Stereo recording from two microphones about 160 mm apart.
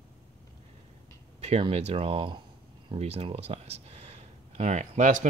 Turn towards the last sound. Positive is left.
turn(degrees=-55)  # may be behind; listen again after turning